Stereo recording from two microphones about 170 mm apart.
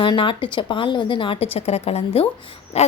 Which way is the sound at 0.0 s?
30° left (ahead or behind).